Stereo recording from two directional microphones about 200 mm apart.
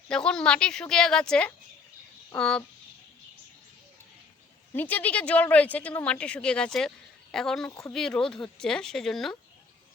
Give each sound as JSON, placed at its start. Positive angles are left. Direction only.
{"t": 0.1, "sound": "speech", "side_deg": 5}
{"t": 4.7, "sound": "speech", "side_deg": 10}
{"t": 7.7, "sound": "speech", "side_deg": 15}
{"t": 7.9, "sound": "speech", "side_deg": 5}